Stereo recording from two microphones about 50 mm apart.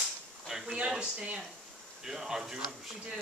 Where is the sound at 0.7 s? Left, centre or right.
Right.